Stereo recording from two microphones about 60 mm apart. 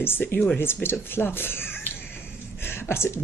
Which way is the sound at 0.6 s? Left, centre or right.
Left.